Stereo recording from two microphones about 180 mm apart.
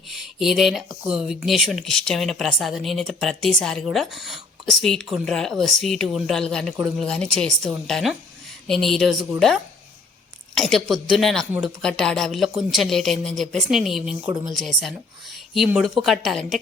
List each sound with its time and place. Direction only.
0.1 s a sound: centre (ahead or behind)
1.0 s speech: 5° right (ahead or behind)
10.5 s speech: centre (ahead or behind)